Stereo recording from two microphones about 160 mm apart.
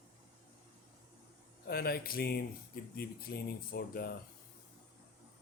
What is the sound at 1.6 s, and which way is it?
Speech, 70° left (ahead or behind).